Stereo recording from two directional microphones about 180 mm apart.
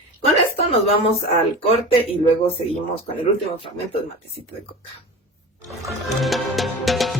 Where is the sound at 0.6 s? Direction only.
35° left (ahead or behind).